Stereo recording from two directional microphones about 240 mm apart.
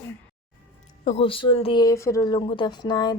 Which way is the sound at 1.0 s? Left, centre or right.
Left.